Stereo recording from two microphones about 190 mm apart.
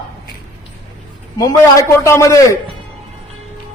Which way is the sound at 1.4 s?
15° left (ahead or behind).